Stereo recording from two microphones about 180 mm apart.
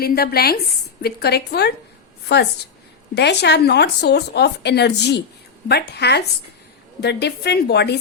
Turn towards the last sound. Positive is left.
turn(degrees=65)  # may be behind; listen again after turning